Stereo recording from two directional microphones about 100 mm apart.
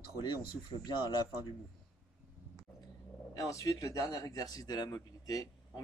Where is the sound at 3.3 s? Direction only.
30° left (ahead or behind).